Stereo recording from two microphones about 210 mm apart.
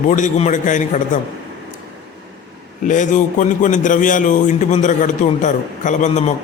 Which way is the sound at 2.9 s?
35° left (ahead or behind).